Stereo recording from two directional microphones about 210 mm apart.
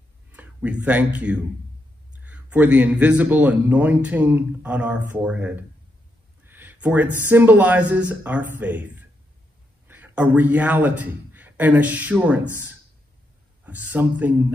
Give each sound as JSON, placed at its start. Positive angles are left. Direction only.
{"t": 0.3, "sound": "a man's voice", "side_deg": -5}
{"t": 9.8, "sound": "a man's voice", "side_deg": -10}